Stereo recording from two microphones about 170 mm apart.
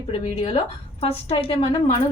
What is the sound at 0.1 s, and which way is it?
A woman's voice, 30° left (ahead or behind).